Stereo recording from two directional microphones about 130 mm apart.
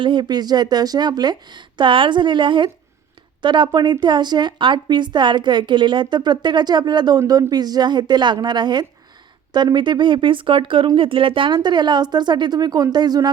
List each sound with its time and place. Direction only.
0.0 s a woman's voice: 35° right (ahead or behind)